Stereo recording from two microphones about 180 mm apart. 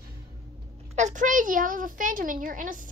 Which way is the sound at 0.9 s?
40° right (ahead or behind).